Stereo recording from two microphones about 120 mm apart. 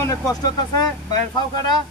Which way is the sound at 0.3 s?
35° left (ahead or behind).